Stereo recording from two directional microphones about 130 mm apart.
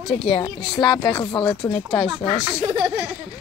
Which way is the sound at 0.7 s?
40° left (ahead or behind).